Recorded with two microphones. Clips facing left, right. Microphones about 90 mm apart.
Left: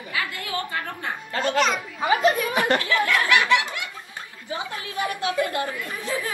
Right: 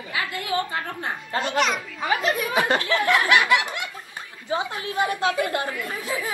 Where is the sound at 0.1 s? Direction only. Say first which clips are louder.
Right 3 dB; 20° right (ahead or behind).